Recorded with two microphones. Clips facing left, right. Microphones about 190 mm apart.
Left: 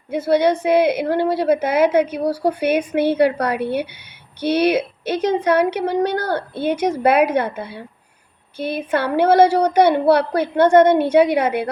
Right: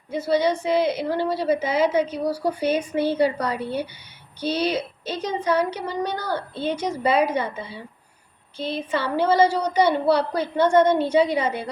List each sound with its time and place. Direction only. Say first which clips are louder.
0.1 s a woman's voice: left 5 dB; 60° left (ahead or behind)